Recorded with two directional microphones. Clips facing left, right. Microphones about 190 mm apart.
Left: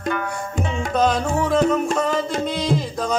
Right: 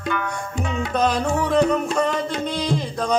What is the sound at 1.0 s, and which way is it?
Music, centre (ahead or behind).